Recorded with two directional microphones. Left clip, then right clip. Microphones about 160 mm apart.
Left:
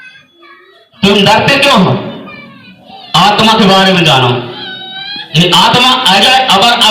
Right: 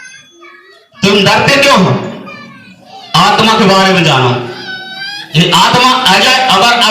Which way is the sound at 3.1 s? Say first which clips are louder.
Left 1 dB; 35° right (ahead or behind).